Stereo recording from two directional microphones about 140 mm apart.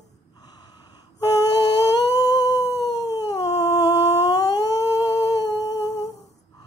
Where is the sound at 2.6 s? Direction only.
25° left (ahead or behind).